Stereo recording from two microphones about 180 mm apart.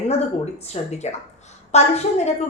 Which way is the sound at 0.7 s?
40° left (ahead or behind).